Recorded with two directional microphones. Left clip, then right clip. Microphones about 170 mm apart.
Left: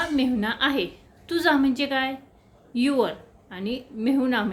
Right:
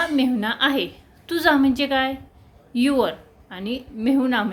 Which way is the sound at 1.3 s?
20° right (ahead or behind).